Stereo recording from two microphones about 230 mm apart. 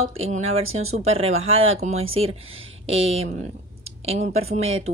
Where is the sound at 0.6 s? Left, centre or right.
Right.